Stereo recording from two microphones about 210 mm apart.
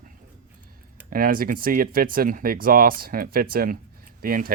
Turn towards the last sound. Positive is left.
turn(degrees=-45)  # may be behind; listen again after turning